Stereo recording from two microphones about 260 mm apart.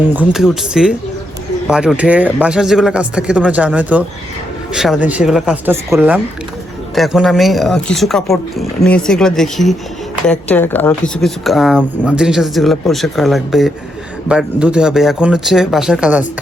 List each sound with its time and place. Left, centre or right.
0.1 s speech: centre